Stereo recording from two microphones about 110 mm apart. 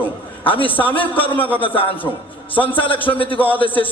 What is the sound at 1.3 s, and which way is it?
Speech, 15° left (ahead or behind).